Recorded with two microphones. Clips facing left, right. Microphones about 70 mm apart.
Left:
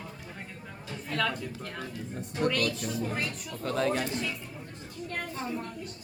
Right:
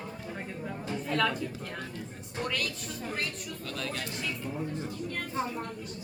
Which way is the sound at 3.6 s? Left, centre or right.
Left.